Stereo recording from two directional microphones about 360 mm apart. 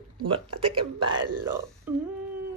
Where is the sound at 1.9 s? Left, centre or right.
Centre.